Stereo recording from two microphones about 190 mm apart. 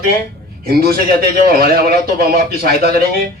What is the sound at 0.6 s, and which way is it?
A man's voice, 50° right (ahead or behind).